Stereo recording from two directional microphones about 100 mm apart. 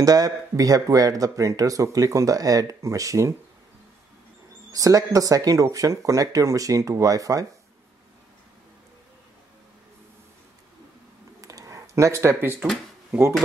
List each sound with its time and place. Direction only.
0.0 s speech: 35° right (ahead or behind)
4.7 s speech: 35° right (ahead or behind)
11.4 s a sound: 35° right (ahead or behind)